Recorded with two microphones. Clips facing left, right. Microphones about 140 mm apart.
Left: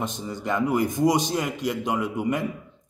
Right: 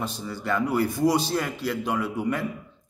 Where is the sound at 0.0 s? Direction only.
20° left (ahead or behind).